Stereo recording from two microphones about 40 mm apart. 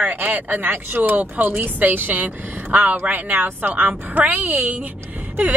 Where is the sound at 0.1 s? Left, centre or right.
Right.